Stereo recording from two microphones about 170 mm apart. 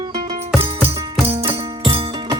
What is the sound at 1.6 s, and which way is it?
Music, 35° right (ahead or behind).